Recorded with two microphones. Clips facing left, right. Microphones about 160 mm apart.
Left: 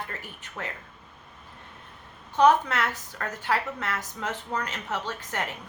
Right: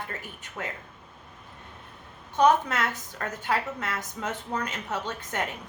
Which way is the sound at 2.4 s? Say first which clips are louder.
Left 1 dB; 20° right (ahead or behind).